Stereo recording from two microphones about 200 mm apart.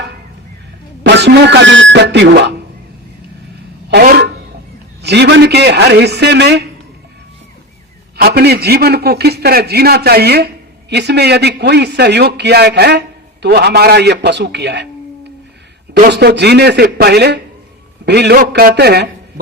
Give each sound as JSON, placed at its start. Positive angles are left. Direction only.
{"t": 1.0, "sound": "speech", "side_deg": -55}
{"t": 3.8, "sound": "a man's voice", "side_deg": -50}
{"t": 8.1, "sound": "a man's voice", "side_deg": -55}
{"t": 16.0, "sound": "a man's voice", "side_deg": -55}